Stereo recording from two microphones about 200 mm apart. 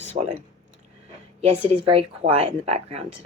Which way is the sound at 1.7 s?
30° right (ahead or behind).